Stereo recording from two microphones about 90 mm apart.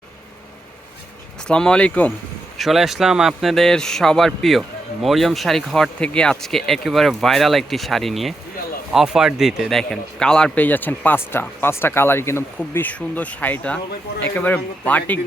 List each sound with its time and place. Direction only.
1.5 s speech: 10° left (ahead or behind)
2.6 s a man's voice: centre (ahead or behind); by 15.2 s 15° left (ahead or behind)